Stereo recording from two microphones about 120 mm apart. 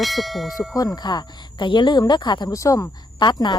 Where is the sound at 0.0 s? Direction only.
Centre (ahead or behind).